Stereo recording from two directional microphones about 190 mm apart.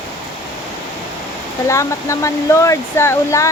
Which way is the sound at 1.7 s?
15° left (ahead or behind).